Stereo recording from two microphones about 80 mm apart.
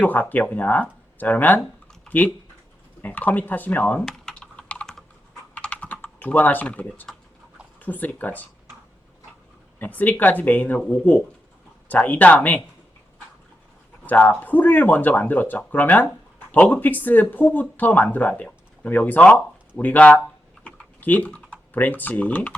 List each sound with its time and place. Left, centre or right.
0.0 s speech: left
4.0 s typing: centre
4.4 s typing: centre
7.8 s speech: left
9.7 s speech: left
11.9 s speech: left
14.1 s speech: left
20.7 s typing: left